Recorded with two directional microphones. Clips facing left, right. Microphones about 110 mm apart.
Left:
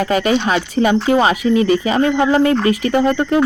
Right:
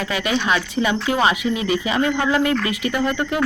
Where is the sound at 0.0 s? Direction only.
45° left (ahead or behind).